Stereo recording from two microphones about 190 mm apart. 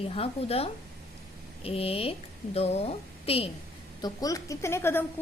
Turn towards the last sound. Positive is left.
turn(degrees=10)  # may be behind; listen again after turning